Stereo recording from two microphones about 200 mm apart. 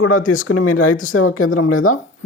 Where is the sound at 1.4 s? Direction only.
90° left.